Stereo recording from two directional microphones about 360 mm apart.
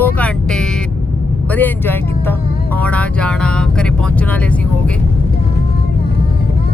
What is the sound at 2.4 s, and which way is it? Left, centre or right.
Music, left.